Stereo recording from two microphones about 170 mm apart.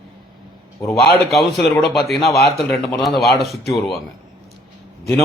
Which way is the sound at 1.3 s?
Centre (ahead or behind).